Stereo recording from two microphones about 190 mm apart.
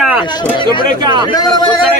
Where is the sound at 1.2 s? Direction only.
20° left (ahead or behind).